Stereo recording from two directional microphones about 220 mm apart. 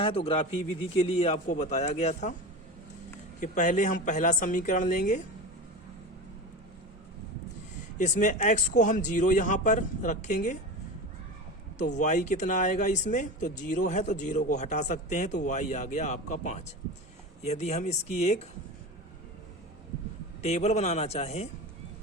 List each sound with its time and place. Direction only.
0.0 s a man's voice: 25° left (ahead or behind)
3.4 s speech: 35° left (ahead or behind)
7.9 s speech: 35° left (ahead or behind)
11.9 s speech: 35° left (ahead or behind)
20.4 s a man's voice: 30° left (ahead or behind)